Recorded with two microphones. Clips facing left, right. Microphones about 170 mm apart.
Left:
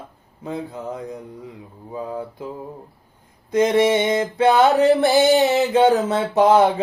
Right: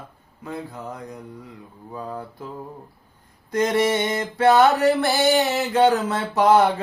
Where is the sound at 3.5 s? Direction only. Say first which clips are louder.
Left 4 dB; 15° left (ahead or behind).